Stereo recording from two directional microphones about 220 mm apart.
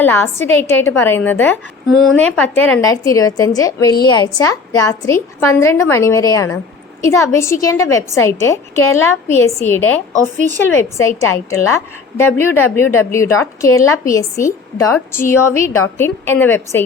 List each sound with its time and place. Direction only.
0.0 s a woman's voice: 10° left (ahead or behind)